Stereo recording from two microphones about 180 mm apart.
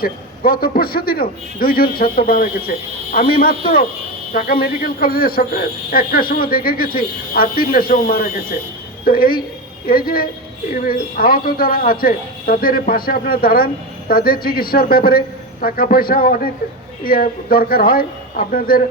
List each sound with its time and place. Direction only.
0.0 s a man's voice: 55° left (ahead or behind)